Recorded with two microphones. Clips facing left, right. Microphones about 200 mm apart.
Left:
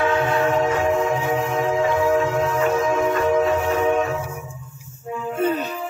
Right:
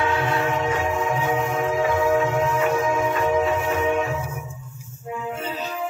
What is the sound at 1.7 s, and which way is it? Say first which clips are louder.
Music: left 2 dB; 35° left (ahead or behind).